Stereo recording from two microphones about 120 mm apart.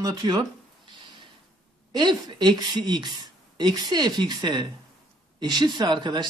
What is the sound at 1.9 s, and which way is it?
Speech, 40° right (ahead or behind).